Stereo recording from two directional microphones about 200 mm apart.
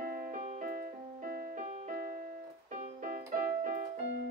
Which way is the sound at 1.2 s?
40° right (ahead or behind).